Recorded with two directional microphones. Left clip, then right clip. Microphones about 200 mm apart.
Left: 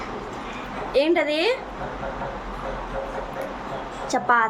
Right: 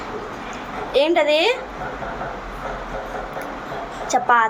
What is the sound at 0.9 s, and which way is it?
Speech, 20° left (ahead or behind).